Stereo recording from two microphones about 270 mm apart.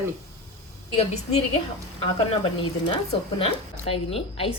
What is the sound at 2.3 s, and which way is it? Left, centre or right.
A woman's voice, centre.